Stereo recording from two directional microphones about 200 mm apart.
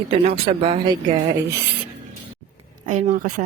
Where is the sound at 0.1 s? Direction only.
30° right (ahead or behind).